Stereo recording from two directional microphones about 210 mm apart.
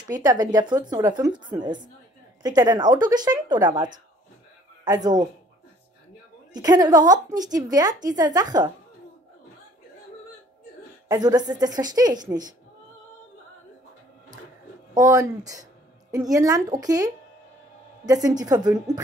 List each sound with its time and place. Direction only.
0.1 s a woman's voice: 20° right (ahead or behind)
2.4 s a woman's voice: 20° right (ahead or behind)
6.5 s a woman's voice: 15° right (ahead or behind)
11.1 s a woman's voice: 20° right (ahead or behind)
15.0 s a woman's voice: 15° right (ahead or behind)